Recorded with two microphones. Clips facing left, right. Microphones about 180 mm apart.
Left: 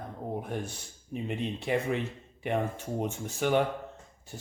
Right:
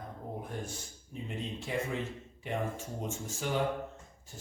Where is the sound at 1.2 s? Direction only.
65° left (ahead or behind).